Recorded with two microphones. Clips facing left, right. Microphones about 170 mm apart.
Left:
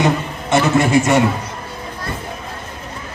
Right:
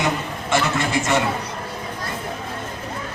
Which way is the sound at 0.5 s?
20° left (ahead or behind).